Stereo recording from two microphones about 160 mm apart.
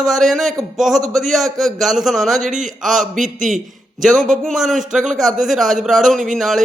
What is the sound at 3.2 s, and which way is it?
Speech, 55° right (ahead or behind).